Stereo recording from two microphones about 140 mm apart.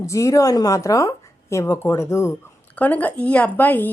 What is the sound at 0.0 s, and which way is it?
A woman's voice, 20° left (ahead or behind).